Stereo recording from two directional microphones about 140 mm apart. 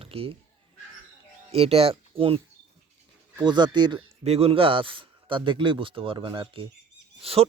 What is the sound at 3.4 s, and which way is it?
Speech, 30° right (ahead or behind).